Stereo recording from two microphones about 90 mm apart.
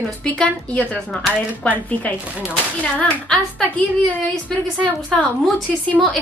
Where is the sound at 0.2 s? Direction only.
10° left (ahead or behind).